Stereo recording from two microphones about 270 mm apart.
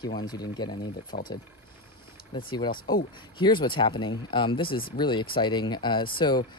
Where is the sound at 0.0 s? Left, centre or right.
Centre.